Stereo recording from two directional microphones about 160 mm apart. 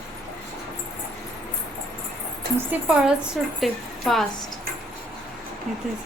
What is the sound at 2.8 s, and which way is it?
A woman's voice, 5° right (ahead or behind).